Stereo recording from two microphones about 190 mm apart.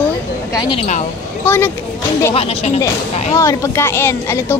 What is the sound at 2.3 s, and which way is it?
Speech, 30° left (ahead or behind).